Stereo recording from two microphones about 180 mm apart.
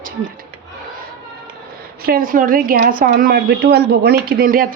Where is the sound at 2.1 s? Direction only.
50° right (ahead or behind).